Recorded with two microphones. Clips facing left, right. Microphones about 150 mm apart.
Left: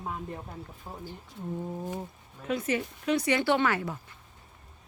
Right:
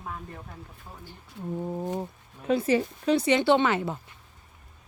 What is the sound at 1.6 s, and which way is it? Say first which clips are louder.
Speech: right 7 dB; 20° right (ahead or behind).